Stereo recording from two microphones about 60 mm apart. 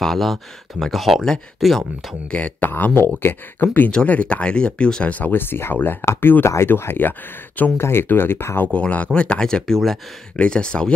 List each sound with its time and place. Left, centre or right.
0.0 s speech: centre
2.3 s speech: left
2.7 s speech: left
3.9 s speech: left
5.1 s speech: left
6.4 s speech: left
7.8 s speech: left
8.7 s speech: left